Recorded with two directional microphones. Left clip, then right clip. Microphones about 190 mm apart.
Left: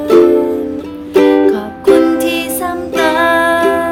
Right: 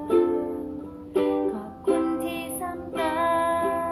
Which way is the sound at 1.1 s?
35° left (ahead or behind).